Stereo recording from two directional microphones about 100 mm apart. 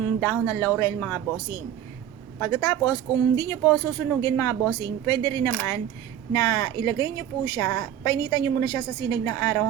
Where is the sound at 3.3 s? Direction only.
30° left (ahead or behind).